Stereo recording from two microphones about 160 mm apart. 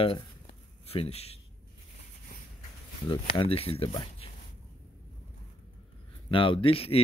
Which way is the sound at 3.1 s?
35° left (ahead or behind).